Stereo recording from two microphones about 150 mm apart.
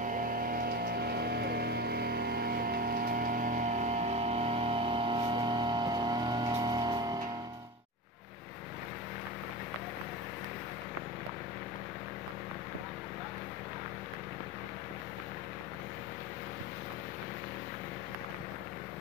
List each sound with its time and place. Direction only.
0.0 s music: 65° right (ahead or behind); by 7.2 s 25° right (ahead or behind)